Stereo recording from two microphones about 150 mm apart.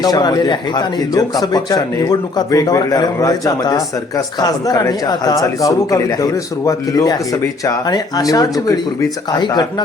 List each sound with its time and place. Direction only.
0.0 s speech: 25° left (ahead or behind)